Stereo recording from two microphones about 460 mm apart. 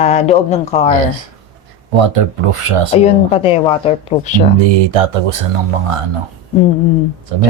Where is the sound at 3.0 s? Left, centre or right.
Centre.